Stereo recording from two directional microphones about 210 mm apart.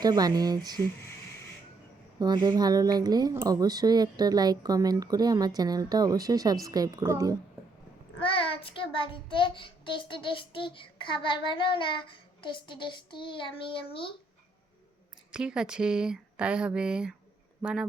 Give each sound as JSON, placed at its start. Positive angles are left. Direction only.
{"t": 0.0, "sound": "speech", "side_deg": -20}
{"t": 2.1, "sound": "speech", "side_deg": -20}
{"t": 8.2, "sound": "child singing", "side_deg": 25}
{"t": 15.3, "sound": "speech", "side_deg": -5}